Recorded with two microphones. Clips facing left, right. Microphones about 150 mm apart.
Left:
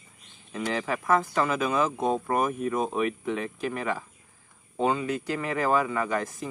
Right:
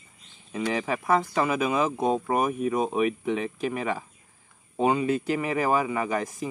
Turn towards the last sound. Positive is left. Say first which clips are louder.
# right 1 dB
turn(degrees=-20)  # may be behind; listen again after turning